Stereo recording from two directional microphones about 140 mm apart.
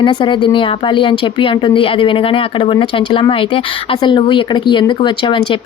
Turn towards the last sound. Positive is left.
turn(degrees=35)  # may be behind; listen again after turning